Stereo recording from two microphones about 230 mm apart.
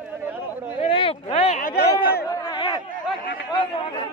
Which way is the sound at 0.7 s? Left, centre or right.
Left.